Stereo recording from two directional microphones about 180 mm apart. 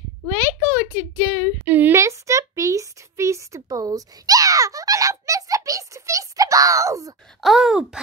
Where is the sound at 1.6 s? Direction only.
10° right (ahead or behind).